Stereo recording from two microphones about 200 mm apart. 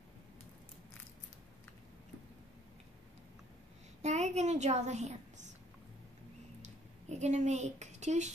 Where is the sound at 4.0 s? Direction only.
35° right (ahead or behind).